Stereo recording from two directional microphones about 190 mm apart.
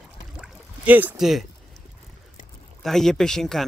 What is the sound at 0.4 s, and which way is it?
Rowboat, 10° right (ahead or behind).